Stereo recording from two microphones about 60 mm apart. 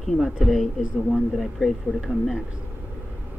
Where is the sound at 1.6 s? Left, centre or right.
Centre.